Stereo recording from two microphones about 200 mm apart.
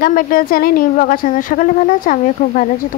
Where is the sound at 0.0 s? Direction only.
45° left (ahead or behind).